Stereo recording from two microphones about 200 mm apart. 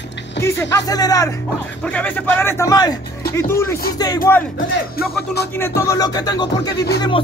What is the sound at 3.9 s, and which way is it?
Music, 20° left (ahead or behind).